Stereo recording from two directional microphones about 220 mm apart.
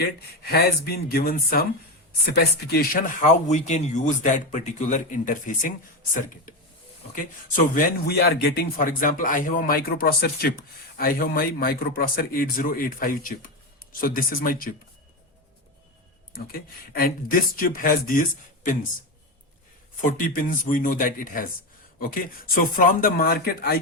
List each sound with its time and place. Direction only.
0.2 s speech: 45° left (ahead or behind)
7.2 s speech: 40° left (ahead or behind)
16.3 s speech: 40° left (ahead or behind)
20.1 s speech: 40° left (ahead or behind)